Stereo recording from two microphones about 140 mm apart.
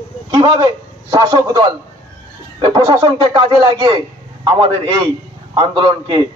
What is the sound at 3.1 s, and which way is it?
A man's voice, 30° right (ahead or behind).